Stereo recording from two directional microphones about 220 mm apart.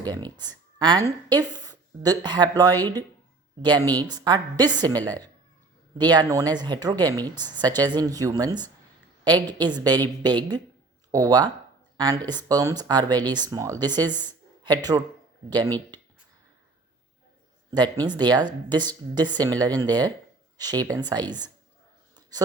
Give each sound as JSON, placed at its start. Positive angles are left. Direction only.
{"t": 0.0, "sound": "speech", "side_deg": -20}
{"t": 6.0, "sound": "a woman's voice", "side_deg": -20}
{"t": 14.3, "sound": "a sound", "side_deg": -20}
{"t": 15.4, "sound": "a woman's voice", "side_deg": -20}
{"t": 17.7, "sound": "speech", "side_deg": -20}